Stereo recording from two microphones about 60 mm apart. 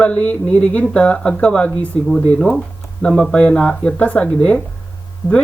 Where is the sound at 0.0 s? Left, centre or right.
Left.